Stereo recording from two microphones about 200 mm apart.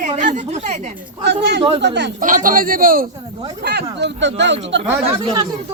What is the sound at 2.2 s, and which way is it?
Speech, 40° right (ahead or behind).